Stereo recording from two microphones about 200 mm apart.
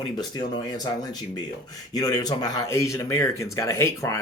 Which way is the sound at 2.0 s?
20° left (ahead or behind).